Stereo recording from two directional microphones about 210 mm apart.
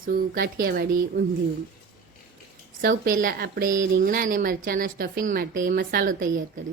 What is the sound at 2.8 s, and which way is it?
A woman's voice, 45° right (ahead or behind).